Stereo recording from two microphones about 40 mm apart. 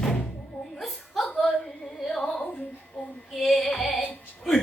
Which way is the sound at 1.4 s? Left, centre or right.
Centre.